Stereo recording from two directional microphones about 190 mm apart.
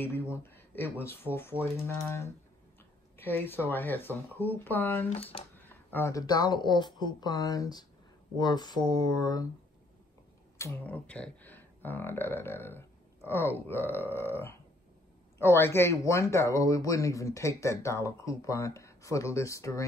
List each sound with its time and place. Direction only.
0.0 s speech: 10° left (ahead or behind)
10.6 s speech: 10° left (ahead or behind)